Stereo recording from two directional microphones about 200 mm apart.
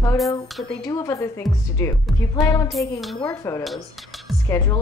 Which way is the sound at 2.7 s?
Centre (ahead or behind).